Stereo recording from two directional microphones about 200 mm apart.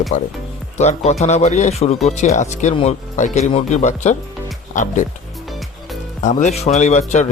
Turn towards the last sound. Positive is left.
turn(degrees=35)  # may be behind; listen again after turning